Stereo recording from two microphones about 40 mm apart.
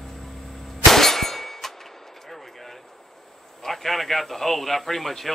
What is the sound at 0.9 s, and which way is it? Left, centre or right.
Clang, centre.